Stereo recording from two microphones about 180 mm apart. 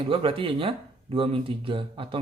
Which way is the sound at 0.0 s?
30° right (ahead or behind).